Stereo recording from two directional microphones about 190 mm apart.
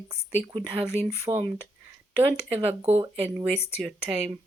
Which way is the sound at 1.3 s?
15° right (ahead or behind).